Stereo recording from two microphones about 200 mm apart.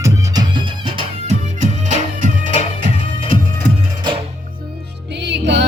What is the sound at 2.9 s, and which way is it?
Music, 25° left (ahead or behind).